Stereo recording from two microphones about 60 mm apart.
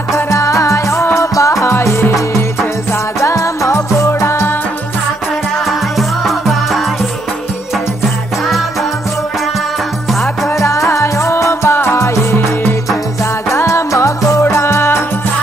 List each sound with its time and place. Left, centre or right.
0.1 s music: left
5.7 s music: centre
10.6 s music: left
13.5 s music: left
14.5 s music: left